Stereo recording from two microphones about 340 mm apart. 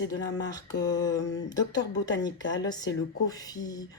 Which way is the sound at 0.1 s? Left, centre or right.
Centre.